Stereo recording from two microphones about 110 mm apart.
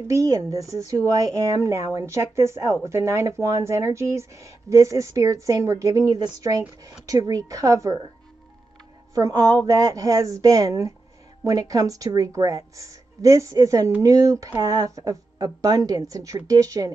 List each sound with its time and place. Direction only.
0.1 s a woman's voice: 30° right (ahead or behind)
9.1 s a woman's voice: 35° right (ahead or behind)